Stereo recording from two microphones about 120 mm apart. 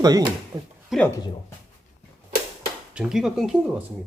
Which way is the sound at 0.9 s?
5° right (ahead or behind).